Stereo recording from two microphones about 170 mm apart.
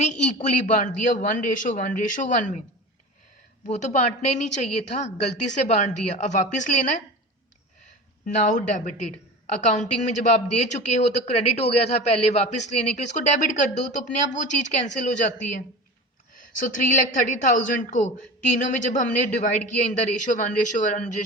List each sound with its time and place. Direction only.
0.0 s a woman's voice: 40° left (ahead or behind)
3.7 s a woman's voice: 45° left (ahead or behind)
8.4 s a woman's voice: 50° left (ahead or behind)
16.6 s a woman's voice: 50° left (ahead or behind)